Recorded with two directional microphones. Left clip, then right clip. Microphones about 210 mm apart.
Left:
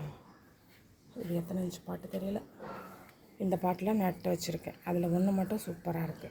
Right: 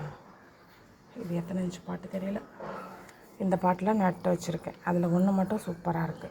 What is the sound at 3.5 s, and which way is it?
A woman's voice, 10° left (ahead or behind).